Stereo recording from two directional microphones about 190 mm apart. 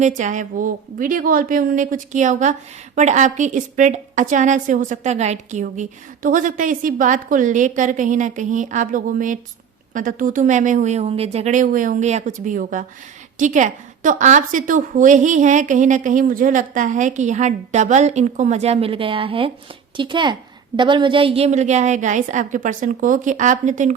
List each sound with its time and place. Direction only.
0.2 s a woman's voice: 40° right (ahead or behind)